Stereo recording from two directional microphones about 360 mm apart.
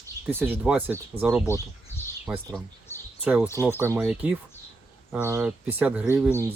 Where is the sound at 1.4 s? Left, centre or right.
Centre.